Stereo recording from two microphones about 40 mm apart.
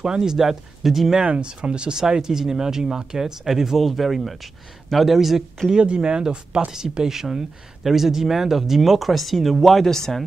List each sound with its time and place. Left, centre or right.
0.0 s speech: centre
1.2 s speech: right; by 5.4 s centre
5.7 s speech: right; by 10.2 s centre